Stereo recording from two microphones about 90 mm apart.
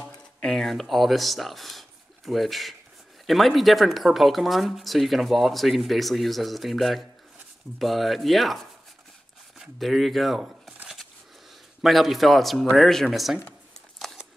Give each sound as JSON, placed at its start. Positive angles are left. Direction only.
{"t": 0.4, "sound": "speech", "side_deg": 5}
{"t": 11.8, "sound": "speech", "side_deg": 0}
{"t": 13.9, "sound": "a sound", "side_deg": 0}